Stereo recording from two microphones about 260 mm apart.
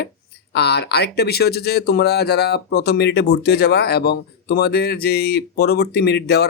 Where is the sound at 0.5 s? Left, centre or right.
Left.